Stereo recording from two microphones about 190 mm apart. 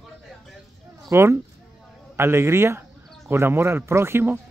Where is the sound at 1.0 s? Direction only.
15° right (ahead or behind).